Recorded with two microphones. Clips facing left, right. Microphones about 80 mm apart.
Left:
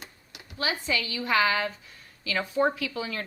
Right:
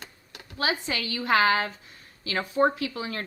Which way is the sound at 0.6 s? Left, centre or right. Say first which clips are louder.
Right 1 dB; right.